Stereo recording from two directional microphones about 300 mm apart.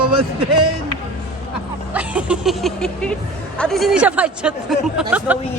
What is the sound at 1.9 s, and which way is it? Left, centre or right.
Speech, centre.